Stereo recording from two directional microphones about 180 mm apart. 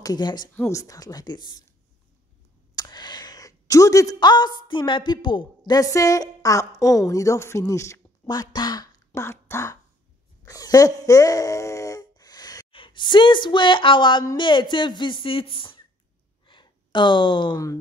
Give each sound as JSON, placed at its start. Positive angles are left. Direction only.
{"t": 0.0, "sound": "a woman's voice", "side_deg": 20}
{"t": 2.7, "sound": "a woman's voice", "side_deg": 20}
{"t": 6.8, "sound": "speech", "side_deg": 0}
{"t": 7.1, "sound": "speech", "side_deg": 15}
{"t": 16.4, "sound": "a sound", "side_deg": 25}